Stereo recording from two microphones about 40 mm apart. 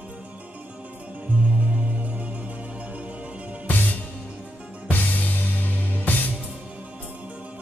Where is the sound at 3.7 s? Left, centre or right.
Left.